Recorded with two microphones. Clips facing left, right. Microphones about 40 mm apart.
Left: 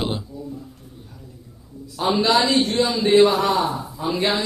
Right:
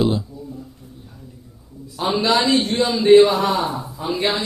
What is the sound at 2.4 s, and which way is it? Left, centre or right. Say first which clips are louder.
Speech: right 1 dB; centre.